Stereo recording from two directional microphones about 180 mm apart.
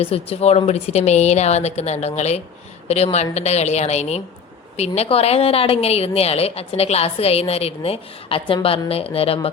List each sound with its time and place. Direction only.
0.0 s a woman's voice: 35° left (ahead or behind)